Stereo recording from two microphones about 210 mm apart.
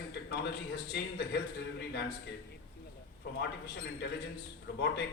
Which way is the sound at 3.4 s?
55° left (ahead or behind).